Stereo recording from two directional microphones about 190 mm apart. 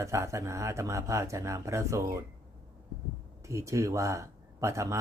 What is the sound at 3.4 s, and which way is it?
Speech, 15° right (ahead or behind).